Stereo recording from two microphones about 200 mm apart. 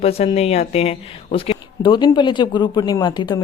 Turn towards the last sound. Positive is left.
turn(degrees=20)  # may be behind; listen again after turning